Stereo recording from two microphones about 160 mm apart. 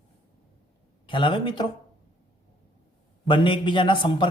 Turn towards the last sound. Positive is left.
turn(degrees=30)  # may be behind; listen again after turning